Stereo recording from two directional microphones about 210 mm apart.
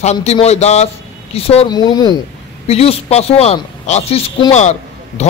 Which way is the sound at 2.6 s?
30° left (ahead or behind).